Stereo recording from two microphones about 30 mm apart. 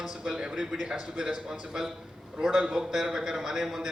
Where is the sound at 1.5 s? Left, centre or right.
Centre.